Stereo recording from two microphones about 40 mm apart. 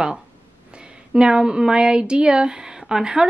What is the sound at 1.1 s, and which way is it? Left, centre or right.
Speech, right.